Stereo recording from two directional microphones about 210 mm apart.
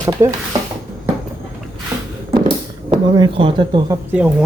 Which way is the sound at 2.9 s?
20° right (ahead or behind).